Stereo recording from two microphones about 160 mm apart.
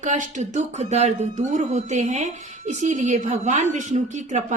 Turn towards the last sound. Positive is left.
turn(degrees=-50)  # may be behind; listen again after turning